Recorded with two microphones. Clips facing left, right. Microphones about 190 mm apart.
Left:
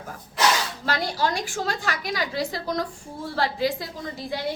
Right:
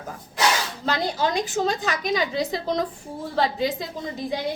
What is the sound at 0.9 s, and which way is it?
A woman's voice, 20° right (ahead or behind).